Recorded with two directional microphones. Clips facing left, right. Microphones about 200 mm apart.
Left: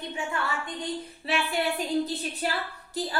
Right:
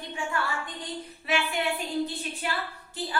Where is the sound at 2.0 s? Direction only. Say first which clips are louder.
Left 2 dB; 40° left (ahead or behind).